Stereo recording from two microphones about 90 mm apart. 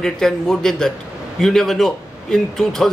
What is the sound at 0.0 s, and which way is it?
A man's voice, 5° left (ahead or behind).